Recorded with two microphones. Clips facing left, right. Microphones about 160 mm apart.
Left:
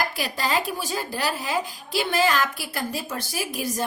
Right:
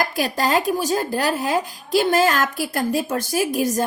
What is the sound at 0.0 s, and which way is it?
Speech, 45° right (ahead or behind).